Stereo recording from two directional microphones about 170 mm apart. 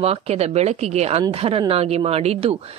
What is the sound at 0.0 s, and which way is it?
Speech, 35° right (ahead or behind).